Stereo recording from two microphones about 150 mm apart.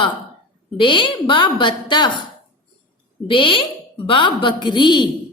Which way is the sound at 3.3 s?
35° left (ahead or behind).